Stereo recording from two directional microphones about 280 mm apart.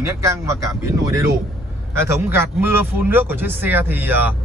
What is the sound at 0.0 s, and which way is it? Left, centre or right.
Speech, centre.